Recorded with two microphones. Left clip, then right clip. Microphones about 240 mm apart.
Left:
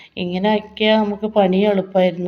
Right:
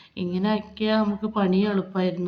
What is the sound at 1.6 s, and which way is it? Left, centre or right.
Speech, right.